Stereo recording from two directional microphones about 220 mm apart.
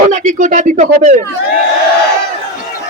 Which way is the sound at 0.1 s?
35° right (ahead or behind).